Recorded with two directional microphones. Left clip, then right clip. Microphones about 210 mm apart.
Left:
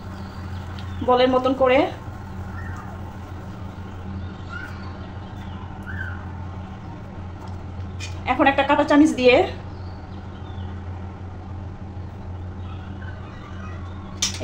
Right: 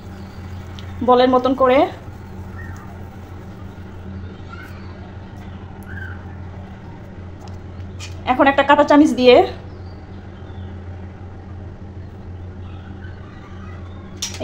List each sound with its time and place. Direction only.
1.0 s a woman's voice: 30° right (ahead or behind)
8.3 s a woman's voice: 30° right (ahead or behind)